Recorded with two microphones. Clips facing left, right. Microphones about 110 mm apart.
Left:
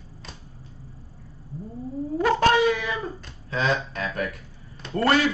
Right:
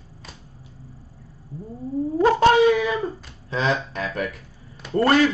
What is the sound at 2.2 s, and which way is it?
A man's voice, 25° right (ahead or behind).